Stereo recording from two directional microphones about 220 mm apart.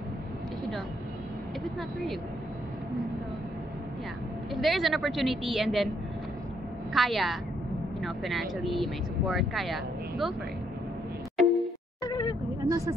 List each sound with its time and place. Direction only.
4.6 s a woman's voice: centre (ahead or behind)
6.9 s a woman's voice: centre (ahead or behind)
11.3 s music: centre (ahead or behind)
12.1 s vehicle: 15° left (ahead or behind)
12.6 s a woman's voice: 15° right (ahead or behind)